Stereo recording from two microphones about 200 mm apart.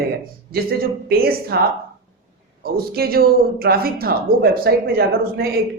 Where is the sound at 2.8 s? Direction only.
50° right (ahead or behind).